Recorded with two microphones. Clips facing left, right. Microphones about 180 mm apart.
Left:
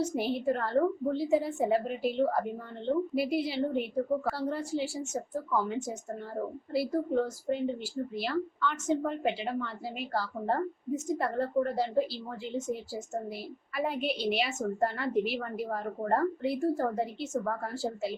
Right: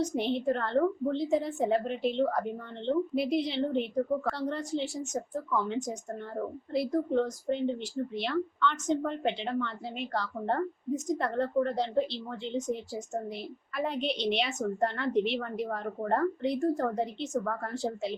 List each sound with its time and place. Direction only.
0.0 s speech: 5° left (ahead or behind)
13.7 s speech: 5° left (ahead or behind)